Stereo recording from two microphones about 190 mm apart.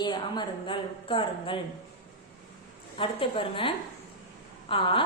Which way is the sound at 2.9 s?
25° left (ahead or behind).